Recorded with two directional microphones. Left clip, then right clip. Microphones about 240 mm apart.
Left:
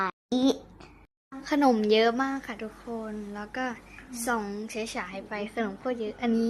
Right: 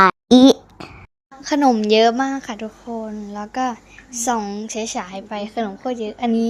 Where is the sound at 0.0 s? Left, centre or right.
Right.